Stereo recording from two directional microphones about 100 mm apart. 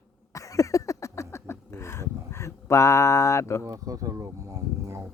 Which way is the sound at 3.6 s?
35° right (ahead or behind).